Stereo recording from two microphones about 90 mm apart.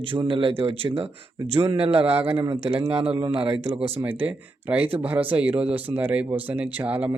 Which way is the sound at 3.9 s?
20° right (ahead or behind).